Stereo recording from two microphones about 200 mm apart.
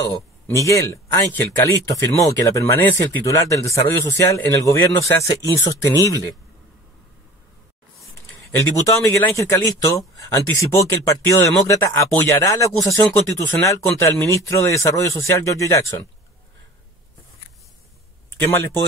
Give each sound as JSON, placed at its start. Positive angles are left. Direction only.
{"t": 0.0, "sound": "speech", "side_deg": 15}
{"t": 8.0, "sound": "speech", "side_deg": 15}
{"t": 18.4, "sound": "speech", "side_deg": 10}